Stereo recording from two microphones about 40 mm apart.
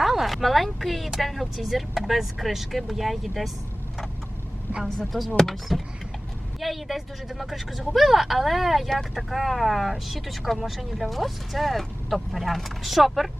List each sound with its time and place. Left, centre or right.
0.0 s speech: centre
5.4 s speech: centre